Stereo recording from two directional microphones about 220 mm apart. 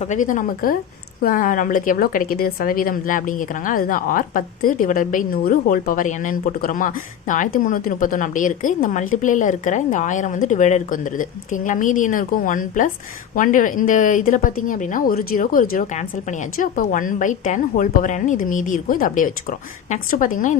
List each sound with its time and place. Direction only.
0.0 s a woman's voice: 35° left (ahead or behind)